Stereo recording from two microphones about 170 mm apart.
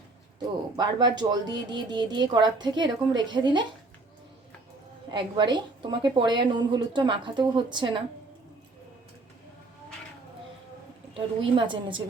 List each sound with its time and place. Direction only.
0.8 s speech: 25° right (ahead or behind)
5.1 s speech: 25° right (ahead or behind)
11.1 s speech: 30° right (ahead or behind)